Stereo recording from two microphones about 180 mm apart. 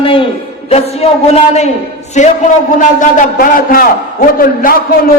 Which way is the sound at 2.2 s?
40° left (ahead or behind).